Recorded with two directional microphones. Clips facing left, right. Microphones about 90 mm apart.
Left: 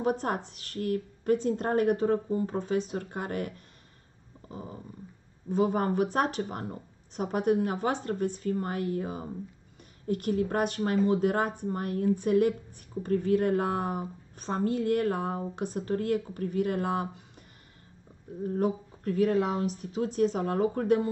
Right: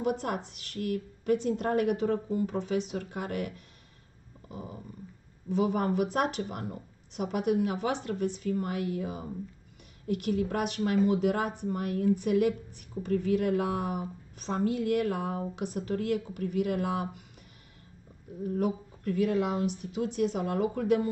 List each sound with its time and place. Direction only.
0.0 s a woman's voice: 40° left (ahead or behind)
4.5 s dog: 35° left (ahead or behind)
5.5 s a woman's voice: 40° left (ahead or behind)
18.4 s a woman's voice: 40° left (ahead or behind)